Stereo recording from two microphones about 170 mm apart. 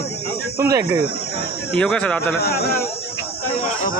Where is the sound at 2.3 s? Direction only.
70° left (ahead or behind).